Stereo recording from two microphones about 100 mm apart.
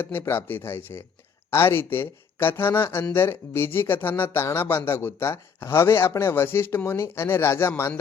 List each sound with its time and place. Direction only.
0.0 s speech: 20° left (ahead or behind)